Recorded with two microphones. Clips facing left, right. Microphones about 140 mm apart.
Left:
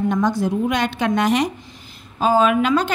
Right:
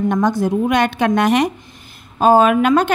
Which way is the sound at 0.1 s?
55° right (ahead or behind).